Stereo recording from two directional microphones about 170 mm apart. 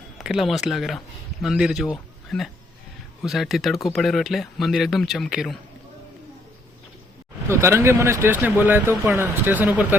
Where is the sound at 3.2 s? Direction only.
Centre (ahead or behind).